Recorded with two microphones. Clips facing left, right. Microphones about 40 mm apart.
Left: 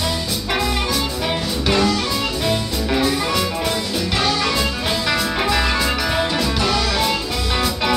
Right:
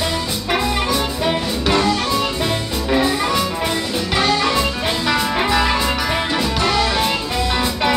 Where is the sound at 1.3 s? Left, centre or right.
Centre.